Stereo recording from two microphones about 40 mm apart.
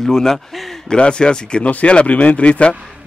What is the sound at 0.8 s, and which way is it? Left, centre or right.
Speech, left.